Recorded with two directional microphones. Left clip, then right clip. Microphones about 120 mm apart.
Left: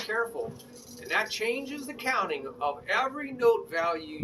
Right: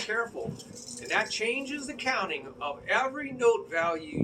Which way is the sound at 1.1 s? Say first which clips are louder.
Even; 25° left (ahead or behind).